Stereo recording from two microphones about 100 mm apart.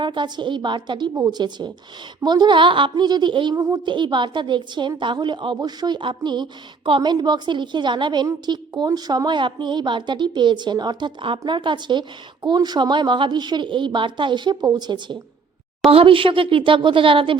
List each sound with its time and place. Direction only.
0.0 s a woman's voice: 50° right (ahead or behind)
2.9 s a woman's voice: 45° right (ahead or behind)
3.5 s a child's voice: 30° right (ahead or behind)
3.8 s a woman's voice: 50° right (ahead or behind)
15.9 s a woman's voice: 65° right (ahead or behind)